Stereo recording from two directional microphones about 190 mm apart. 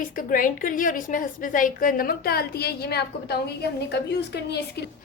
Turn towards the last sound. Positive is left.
turn(degrees=60)  # may be behind; listen again after turning